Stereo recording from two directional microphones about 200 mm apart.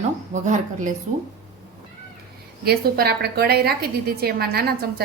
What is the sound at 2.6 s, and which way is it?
A woman's voice, 50° right (ahead or behind).